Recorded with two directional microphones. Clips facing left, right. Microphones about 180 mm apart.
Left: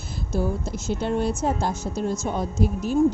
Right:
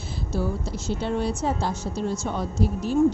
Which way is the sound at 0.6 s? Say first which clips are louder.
Left 1 dB; 50° left (ahead or behind).